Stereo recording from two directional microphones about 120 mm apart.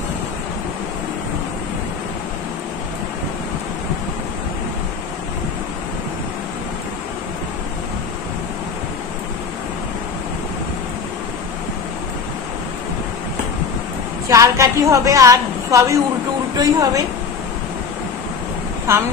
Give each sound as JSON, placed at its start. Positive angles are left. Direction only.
{"t": 14.2, "sound": "a woman's voice", "side_deg": -25}
{"t": 18.9, "sound": "a woman's voice", "side_deg": -25}